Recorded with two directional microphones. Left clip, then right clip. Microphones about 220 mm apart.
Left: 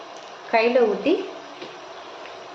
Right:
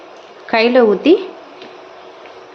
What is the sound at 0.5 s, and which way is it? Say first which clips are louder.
Speech: right 7 dB; 50° right (ahead or behind).